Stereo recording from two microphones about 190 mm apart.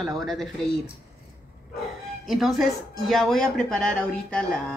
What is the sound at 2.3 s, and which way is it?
A woman's voice, centre (ahead or behind).